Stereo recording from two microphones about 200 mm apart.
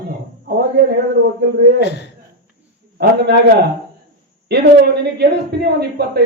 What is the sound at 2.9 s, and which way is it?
Speech, 55° right (ahead or behind).